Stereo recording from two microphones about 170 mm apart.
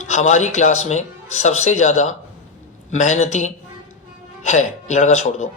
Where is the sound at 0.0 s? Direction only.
45° left (ahead or behind).